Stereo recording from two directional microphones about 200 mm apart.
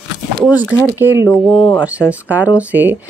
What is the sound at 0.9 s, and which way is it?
Speech, 10° right (ahead or behind).